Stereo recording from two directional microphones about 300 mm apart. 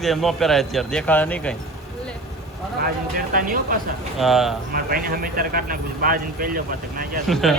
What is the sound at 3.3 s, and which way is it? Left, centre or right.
Speech, right.